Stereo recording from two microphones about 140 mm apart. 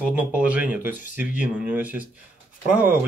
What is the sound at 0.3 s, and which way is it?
Speech, 10° right (ahead or behind).